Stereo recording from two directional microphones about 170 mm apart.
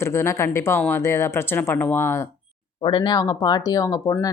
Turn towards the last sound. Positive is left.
turn(degrees=20)  # may be behind; listen again after turning